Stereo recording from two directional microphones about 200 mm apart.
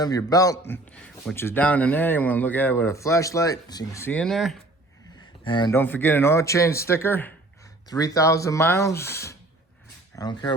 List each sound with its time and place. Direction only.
0.0 s a man's voice: 20° left (ahead or behind); by 4.6 s centre (ahead or behind)
5.2 s a sound: 20° left (ahead or behind)
5.7 s a man's voice: 10° left (ahead or behind)